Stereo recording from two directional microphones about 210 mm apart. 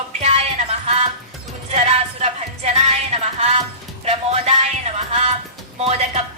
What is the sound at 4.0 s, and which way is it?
Music, 30° right (ahead or behind).